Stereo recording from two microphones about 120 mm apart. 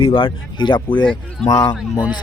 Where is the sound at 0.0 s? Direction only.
50° left (ahead or behind).